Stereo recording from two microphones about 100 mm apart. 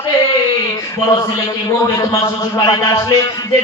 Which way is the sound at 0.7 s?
35° left (ahead or behind).